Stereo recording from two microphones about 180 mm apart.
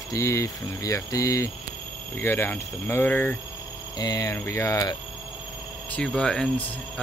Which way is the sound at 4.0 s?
20° left (ahead or behind).